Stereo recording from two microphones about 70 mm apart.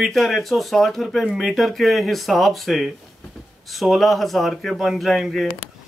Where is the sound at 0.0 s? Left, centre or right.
Centre.